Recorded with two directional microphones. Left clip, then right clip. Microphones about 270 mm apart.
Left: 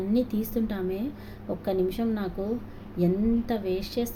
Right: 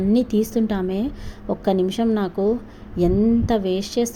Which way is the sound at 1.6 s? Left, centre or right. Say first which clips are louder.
Right 7 dB; right.